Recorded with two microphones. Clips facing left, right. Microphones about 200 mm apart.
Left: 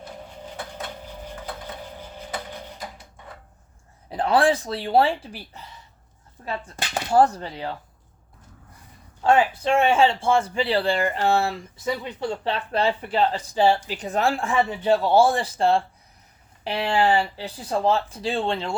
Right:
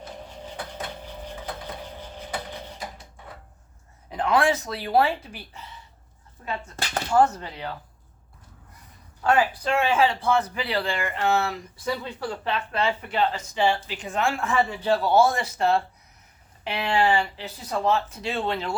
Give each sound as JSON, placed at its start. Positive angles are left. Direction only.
{"t": 4.1, "sound": "speech", "side_deg": 35}
{"t": 7.1, "sound": "speech", "side_deg": 35}
{"t": 9.2, "sound": "speech", "side_deg": 25}
{"t": 11.9, "sound": "speech", "side_deg": 20}